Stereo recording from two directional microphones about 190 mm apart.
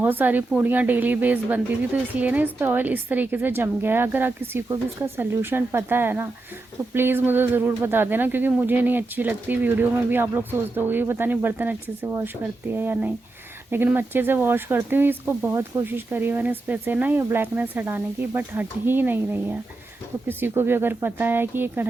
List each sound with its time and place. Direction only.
0.0 s speech: 10° right (ahead or behind)